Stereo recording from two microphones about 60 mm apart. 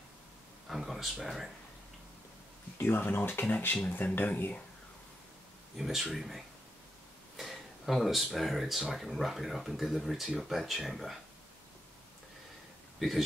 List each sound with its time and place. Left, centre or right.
0.7 s speech: centre
2.8 s speech: left
5.8 s speech: centre